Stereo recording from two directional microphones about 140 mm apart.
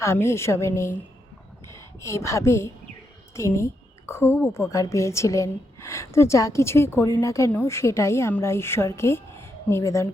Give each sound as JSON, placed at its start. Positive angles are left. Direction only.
{"t": 0.0, "sound": "a woman's voice", "side_deg": 20}
{"t": 2.0, "sound": "a woman's voice", "side_deg": 20}